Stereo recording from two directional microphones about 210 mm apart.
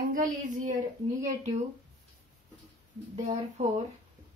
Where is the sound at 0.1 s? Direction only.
40° right (ahead or behind).